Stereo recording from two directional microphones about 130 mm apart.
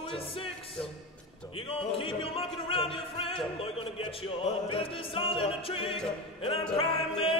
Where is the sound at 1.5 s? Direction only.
45° left (ahead or behind).